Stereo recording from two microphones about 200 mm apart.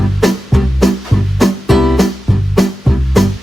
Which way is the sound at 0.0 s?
Centre (ahead or behind).